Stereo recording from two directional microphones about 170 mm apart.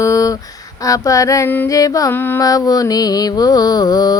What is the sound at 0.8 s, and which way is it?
Music, 20° left (ahead or behind).